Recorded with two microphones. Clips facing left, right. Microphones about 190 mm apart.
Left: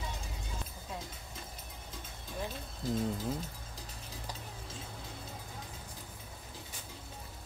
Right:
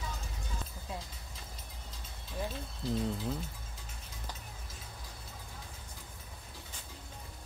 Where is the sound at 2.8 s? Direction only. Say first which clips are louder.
Even; 45° left (ahead or behind).